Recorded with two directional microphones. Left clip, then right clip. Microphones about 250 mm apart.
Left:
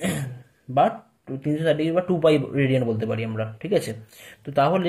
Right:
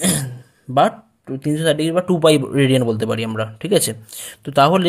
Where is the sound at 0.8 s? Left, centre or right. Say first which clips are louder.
Right 4 dB; right.